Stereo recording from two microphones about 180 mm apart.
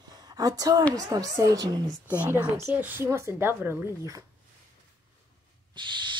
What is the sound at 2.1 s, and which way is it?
A woman's voice, 10° right (ahead or behind).